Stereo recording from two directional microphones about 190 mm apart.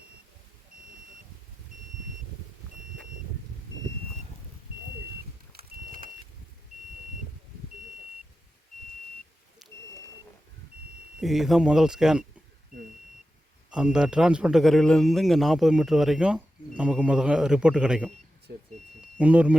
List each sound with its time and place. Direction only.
11.2 s a man's voice: centre (ahead or behind)
13.7 s a man's voice: 5° right (ahead or behind)
18.5 s vehicle: 55° right (ahead or behind)
19.2 s speech: 5° right (ahead or behind)